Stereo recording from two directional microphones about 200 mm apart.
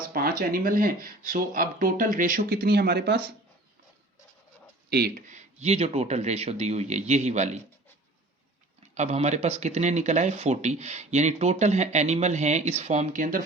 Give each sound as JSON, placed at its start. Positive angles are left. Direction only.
{"t": 0.1, "sound": "speech", "side_deg": -45}
{"t": 4.9, "sound": "speech", "side_deg": -50}
{"t": 9.0, "sound": "speech", "side_deg": -35}